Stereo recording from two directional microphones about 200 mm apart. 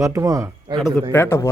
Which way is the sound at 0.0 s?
15° right (ahead or behind).